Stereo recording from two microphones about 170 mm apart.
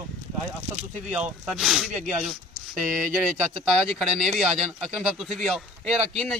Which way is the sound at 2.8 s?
55° right (ahead or behind).